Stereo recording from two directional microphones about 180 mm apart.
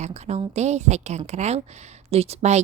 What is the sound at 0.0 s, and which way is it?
A woman's voice, 35° right (ahead or behind).